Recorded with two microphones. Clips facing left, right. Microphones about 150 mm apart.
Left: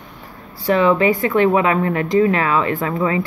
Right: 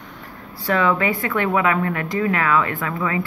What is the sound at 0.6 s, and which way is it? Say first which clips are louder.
Speech: left 5 dB; 20° left (ahead or behind).